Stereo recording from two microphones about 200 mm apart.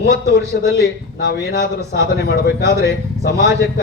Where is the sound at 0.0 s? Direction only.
55° left (ahead or behind).